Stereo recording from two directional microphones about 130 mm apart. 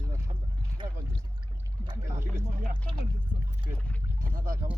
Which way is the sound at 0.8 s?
40° right (ahead or behind).